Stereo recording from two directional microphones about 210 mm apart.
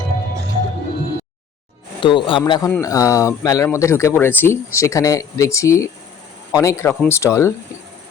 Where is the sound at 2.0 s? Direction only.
25° left (ahead or behind).